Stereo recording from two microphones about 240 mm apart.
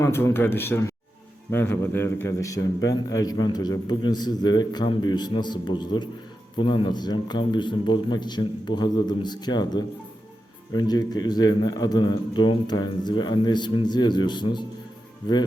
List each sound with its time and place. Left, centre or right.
0.0 s a man's voice: centre